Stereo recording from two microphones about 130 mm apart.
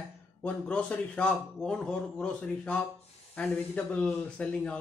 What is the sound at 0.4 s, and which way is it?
A man's voice, 10° left (ahead or behind).